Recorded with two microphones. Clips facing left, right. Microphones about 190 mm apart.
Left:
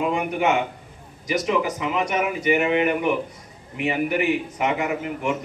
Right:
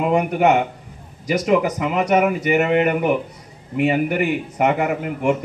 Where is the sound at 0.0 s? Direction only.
50° right (ahead or behind).